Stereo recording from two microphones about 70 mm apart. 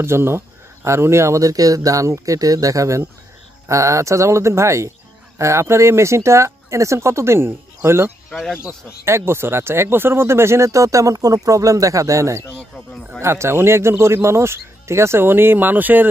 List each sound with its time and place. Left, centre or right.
0.0 s speech: right
8.3 s speech: centre
9.0 s speech: right
12.7 s speech: centre
13.2 s speech: right